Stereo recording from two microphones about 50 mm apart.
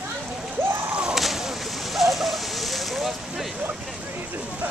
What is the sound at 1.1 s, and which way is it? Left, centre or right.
Whip, centre.